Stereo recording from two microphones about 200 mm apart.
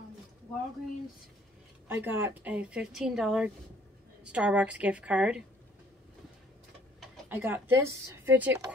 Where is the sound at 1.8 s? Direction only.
10° right (ahead or behind).